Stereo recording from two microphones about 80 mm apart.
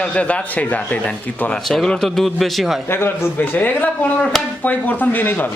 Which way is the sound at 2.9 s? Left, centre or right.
Left.